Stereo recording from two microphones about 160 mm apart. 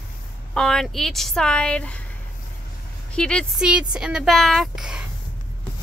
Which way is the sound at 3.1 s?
5° left (ahead or behind).